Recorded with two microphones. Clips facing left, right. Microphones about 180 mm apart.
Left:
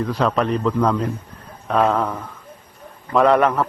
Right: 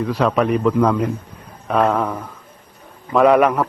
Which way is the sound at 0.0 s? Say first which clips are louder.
Right 2 dB; 5° right (ahead or behind).